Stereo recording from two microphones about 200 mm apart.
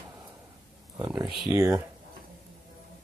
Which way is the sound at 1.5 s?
15° right (ahead or behind).